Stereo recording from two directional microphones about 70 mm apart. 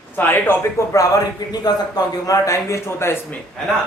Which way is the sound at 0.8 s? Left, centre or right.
Left.